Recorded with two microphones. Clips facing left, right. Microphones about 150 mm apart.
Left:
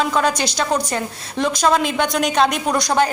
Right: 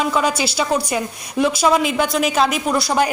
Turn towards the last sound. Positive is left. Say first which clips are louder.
# even
turn(degrees=-5)  # may be behind; listen again after turning